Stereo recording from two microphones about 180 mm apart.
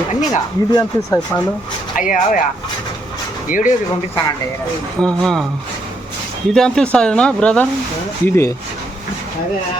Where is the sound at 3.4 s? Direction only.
50° left (ahead or behind).